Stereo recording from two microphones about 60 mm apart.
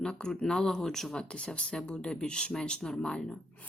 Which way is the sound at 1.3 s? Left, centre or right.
Centre.